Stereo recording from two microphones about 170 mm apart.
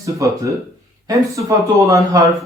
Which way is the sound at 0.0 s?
20° right (ahead or behind).